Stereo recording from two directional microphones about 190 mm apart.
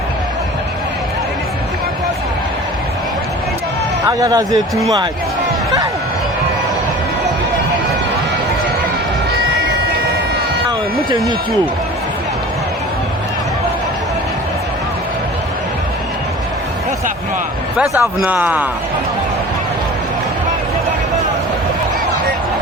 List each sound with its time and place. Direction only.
4.2 s speech: 20° right (ahead or behind)
18.2 s speech: 10° right (ahead or behind)